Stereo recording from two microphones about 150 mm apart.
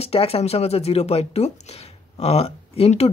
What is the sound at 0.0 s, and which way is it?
Speech, 40° left (ahead or behind).